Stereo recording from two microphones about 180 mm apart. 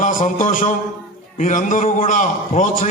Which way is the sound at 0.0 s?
45° left (ahead or behind).